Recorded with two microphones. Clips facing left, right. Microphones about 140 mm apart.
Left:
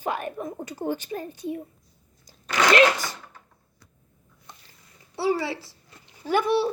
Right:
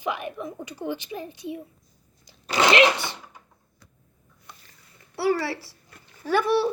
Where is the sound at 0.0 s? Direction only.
45° left (ahead or behind).